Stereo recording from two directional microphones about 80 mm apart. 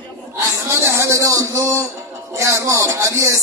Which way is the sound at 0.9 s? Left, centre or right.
Right.